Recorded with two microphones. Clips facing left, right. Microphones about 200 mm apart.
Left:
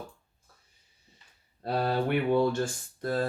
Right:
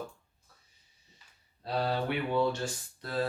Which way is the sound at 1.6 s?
50° left (ahead or behind).